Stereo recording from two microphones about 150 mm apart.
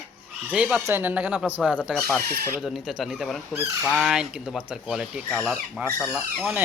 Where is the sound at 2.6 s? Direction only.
Centre (ahead or behind).